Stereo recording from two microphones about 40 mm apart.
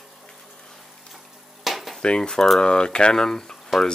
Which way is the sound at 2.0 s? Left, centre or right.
Left.